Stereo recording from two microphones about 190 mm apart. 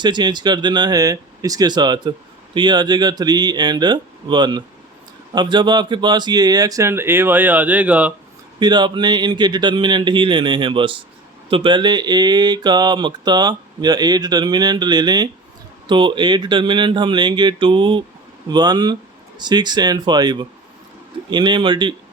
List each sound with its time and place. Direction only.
0.0 s speech: 25° right (ahead or behind); by 8.1 s 5° right (ahead or behind)
8.5 s speech: 20° right (ahead or behind)